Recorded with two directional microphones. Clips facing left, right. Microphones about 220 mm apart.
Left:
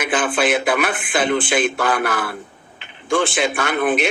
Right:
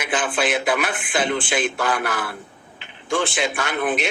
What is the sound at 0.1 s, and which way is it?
A man's voice, 55° left (ahead or behind).